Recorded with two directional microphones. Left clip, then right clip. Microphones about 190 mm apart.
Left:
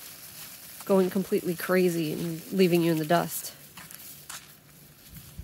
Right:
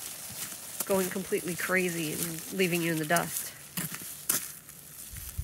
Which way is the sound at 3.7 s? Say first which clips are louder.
Right 6 dB; 75° right (ahead or behind).